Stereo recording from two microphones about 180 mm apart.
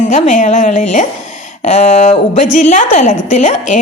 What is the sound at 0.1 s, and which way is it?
A woman's voice, 45° left (ahead or behind).